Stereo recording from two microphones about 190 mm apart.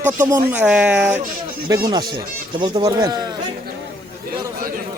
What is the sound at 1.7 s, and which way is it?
Speech, 20° right (ahead or behind).